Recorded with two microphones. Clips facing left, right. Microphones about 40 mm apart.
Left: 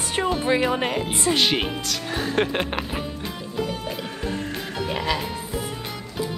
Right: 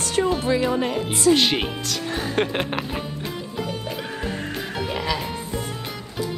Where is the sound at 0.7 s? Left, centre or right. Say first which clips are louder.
Right 1 dB; left.